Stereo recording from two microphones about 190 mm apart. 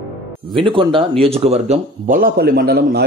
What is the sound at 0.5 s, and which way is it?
A man's voice, 25° right (ahead or behind).